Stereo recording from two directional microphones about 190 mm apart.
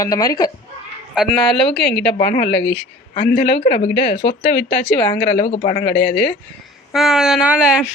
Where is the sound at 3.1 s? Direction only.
35° left (ahead or behind).